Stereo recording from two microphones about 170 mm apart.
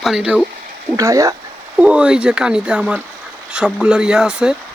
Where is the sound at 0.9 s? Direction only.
20° right (ahead or behind).